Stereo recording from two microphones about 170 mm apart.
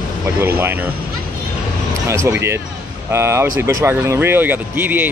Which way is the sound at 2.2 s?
15° right (ahead or behind).